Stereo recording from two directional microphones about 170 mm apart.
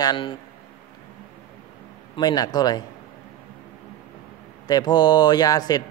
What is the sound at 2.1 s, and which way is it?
Speech, 25° left (ahead or behind).